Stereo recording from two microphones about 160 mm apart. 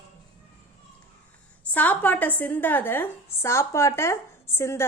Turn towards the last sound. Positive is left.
turn(degrees=15)  # may be behind; listen again after turning